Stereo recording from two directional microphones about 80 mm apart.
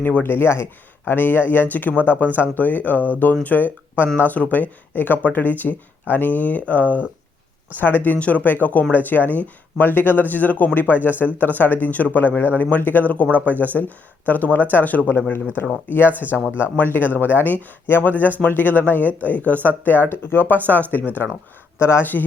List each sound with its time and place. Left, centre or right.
0.0 s speech: left
21.8 s speech: left